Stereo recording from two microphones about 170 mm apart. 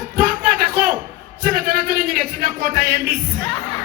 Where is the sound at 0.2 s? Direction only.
55° right (ahead or behind).